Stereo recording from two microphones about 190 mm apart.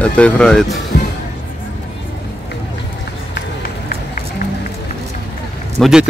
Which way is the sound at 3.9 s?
50° left (ahead or behind).